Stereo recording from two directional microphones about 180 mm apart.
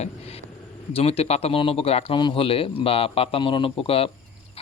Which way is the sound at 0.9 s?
35° left (ahead or behind).